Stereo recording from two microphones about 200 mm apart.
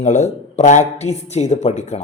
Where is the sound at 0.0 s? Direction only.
35° left (ahead or behind).